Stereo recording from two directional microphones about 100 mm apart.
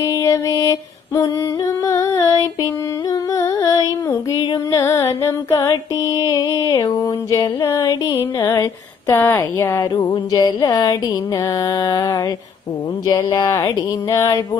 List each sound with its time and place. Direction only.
0.0 s music: 35° left (ahead or behind)
7.3 s a sound: 30° left (ahead or behind)
9.9 s music: 40° left (ahead or behind)